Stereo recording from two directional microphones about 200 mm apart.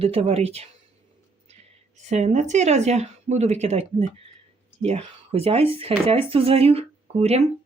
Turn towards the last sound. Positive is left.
turn(degrees=-30)  # may be behind; listen again after turning